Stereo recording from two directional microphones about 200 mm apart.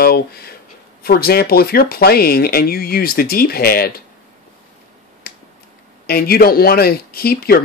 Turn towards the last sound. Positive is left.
turn(degrees=50)  # may be behind; listen again after turning